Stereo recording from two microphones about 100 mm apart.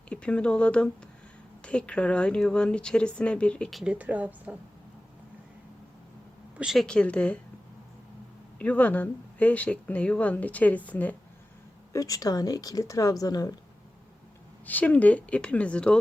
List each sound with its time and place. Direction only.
0.1 s speech: 10° left (ahead or behind)
3.7 s speech: centre (ahead or behind)
3.9 s a woman's voice: 15° right (ahead or behind)
6.6 s speech: 5° right (ahead or behind)
6.8 s speech: 10° left (ahead or behind)
8.5 s speech: 15° left (ahead or behind)
11.9 s speech: 35° left (ahead or behind)
14.7 s speech: 15° left (ahead or behind)